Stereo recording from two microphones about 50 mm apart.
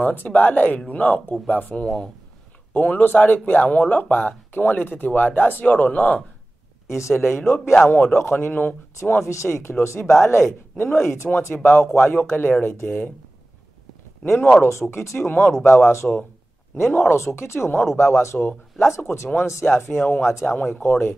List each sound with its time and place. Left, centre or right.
0.0 s speech: left
6.9 s speech: left
7.2 s speech: left
9.2 s speech: left
10.0 s speech: left
11.5 s speech: left
14.2 s speech: left
17.9 s speech: left
19.6 s speech: left
20.7 s speech: left